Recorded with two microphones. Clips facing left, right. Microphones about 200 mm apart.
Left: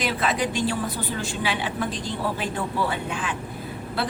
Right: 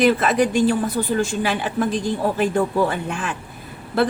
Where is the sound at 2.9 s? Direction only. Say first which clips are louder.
Right 3 dB; 50° right (ahead or behind).